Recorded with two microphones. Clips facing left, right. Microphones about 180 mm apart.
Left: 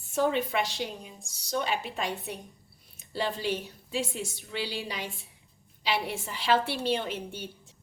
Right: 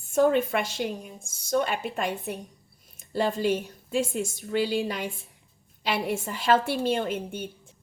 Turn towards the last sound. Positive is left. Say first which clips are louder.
# right 5 dB
turn(degrees=-50)  # may be behind; listen again after turning